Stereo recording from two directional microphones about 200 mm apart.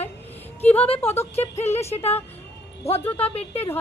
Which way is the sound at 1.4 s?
35° left (ahead or behind).